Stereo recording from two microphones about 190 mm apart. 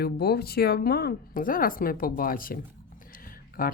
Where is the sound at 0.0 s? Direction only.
55° left (ahead or behind).